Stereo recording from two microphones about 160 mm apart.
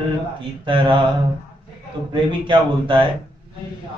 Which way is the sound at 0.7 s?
30° right (ahead or behind).